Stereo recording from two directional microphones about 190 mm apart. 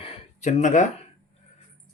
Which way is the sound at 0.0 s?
30° left (ahead or behind).